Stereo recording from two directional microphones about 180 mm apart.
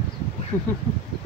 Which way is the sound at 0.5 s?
15° left (ahead or behind).